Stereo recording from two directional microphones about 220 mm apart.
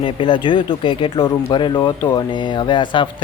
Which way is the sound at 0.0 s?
20° left (ahead or behind).